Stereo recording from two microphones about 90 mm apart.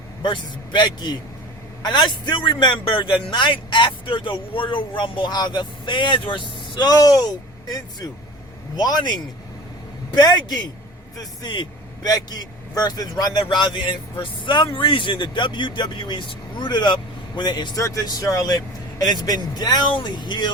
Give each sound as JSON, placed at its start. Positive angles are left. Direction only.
{"t": 0.2, "sound": "a man's voice", "side_deg": 55}
{"t": 11.4, "sound": "a man's voice", "side_deg": 65}
{"t": 12.0, "sound": "a man's voice", "side_deg": 45}
{"t": 17.7, "sound": "speech", "side_deg": 35}